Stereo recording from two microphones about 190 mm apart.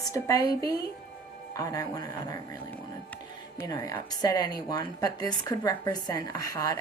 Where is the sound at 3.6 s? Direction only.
20° left (ahead or behind).